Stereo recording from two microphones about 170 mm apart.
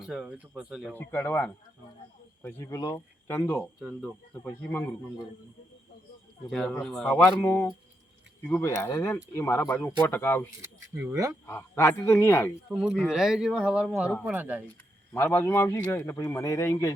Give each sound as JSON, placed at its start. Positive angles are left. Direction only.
{"t": 0.0, "sound": "speech", "side_deg": -5}
{"t": 0.9, "sound": "a man's voice", "side_deg": 10}
{"t": 3.8, "sound": "speech", "side_deg": 0}
{"t": 4.4, "sound": "a man's voice", "side_deg": 15}
{"t": 6.5, "sound": "speech", "side_deg": 5}
{"t": 7.3, "sound": "a man's voice", "side_deg": 15}
{"t": 10.6, "sound": "speech", "side_deg": -15}
{"t": 11.4, "sound": "a man's voice", "side_deg": 15}
{"t": 12.7, "sound": "speech", "side_deg": 0}
{"t": 15.1, "sound": "a man's voice", "side_deg": 15}